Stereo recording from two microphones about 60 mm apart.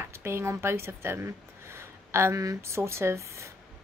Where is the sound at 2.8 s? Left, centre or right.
Right.